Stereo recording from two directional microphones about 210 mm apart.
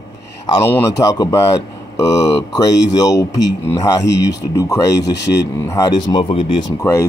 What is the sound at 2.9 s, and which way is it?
A man's voice, 15° left (ahead or behind).